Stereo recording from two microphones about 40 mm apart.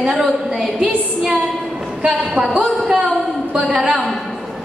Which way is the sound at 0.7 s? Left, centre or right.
Centre.